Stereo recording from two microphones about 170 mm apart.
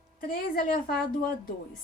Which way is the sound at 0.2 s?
55° left (ahead or behind).